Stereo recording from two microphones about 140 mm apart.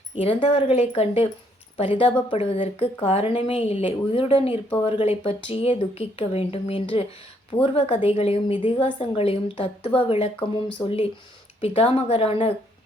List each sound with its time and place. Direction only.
0.2 s a woman's voice: 40° left (ahead or behind)